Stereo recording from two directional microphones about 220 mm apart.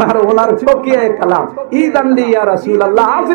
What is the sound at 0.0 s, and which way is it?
A man's voice, 20° right (ahead or behind).